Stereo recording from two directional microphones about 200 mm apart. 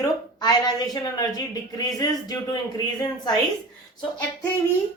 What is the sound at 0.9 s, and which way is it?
Speech, 20° left (ahead or behind).